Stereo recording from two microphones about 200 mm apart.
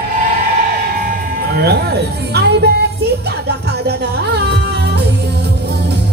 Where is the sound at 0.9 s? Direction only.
50° right (ahead or behind).